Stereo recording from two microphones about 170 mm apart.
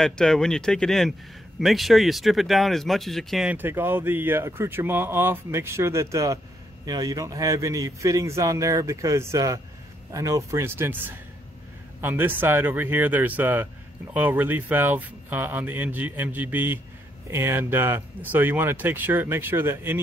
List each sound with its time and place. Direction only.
0.0 s a man's voice: 5° left (ahead or behind); by 20.0 s 15° right (ahead or behind)